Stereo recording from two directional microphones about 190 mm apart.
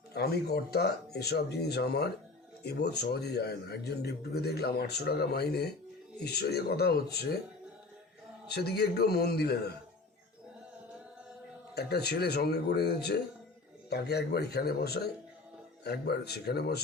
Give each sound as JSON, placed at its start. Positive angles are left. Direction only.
{"t": 0.1, "sound": "a man's voice", "side_deg": 55}
{"t": 8.4, "sound": "a man's voice", "side_deg": 60}
{"t": 11.7, "sound": "a man's voice", "side_deg": 60}